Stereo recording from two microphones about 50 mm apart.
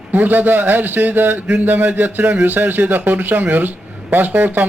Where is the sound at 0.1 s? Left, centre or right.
Right.